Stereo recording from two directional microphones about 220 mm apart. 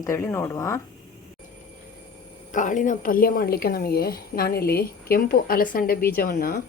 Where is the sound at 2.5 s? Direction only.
35° left (ahead or behind).